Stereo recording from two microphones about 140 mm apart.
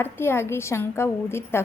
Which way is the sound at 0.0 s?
15° left (ahead or behind).